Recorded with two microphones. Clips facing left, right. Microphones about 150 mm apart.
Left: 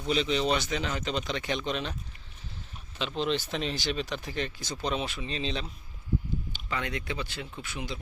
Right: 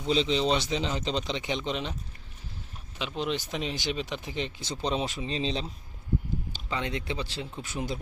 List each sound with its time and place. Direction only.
0.0 s speech: 25° right (ahead or behind)
3.0 s speech: 10° right (ahead or behind); by 5.6 s 30° right (ahead or behind)
6.7 s speech: 25° right (ahead or behind); by 7.9 s 40° right (ahead or behind)